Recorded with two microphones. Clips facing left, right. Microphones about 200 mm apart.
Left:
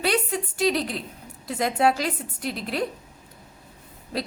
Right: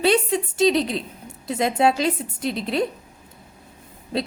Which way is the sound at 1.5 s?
25° right (ahead or behind).